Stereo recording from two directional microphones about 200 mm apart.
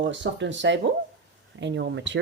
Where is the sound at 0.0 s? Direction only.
65° right (ahead or behind).